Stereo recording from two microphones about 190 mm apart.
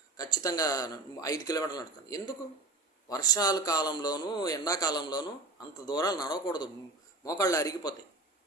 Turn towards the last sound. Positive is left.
turn(degrees=20)  # may be behind; listen again after turning